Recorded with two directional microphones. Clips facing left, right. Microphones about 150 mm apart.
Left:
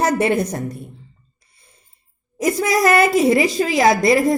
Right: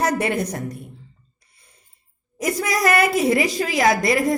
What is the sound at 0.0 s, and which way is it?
Speech, 30° left (ahead or behind).